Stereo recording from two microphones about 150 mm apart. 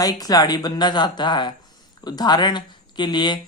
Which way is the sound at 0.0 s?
25° left (ahead or behind).